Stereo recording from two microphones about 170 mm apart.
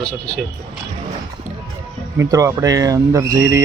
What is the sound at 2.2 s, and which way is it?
Speech, 20° right (ahead or behind).